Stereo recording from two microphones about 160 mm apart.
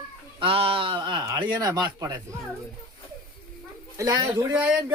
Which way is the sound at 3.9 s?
20° right (ahead or behind).